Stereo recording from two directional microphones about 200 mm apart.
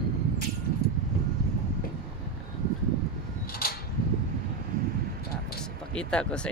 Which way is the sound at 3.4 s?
50° left (ahead or behind).